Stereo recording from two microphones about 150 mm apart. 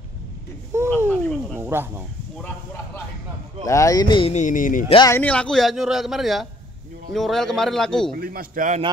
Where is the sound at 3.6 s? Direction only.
20° left (ahead or behind).